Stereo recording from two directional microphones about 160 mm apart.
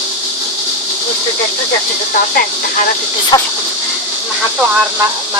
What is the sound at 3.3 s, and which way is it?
Speech, 25° left (ahead or behind).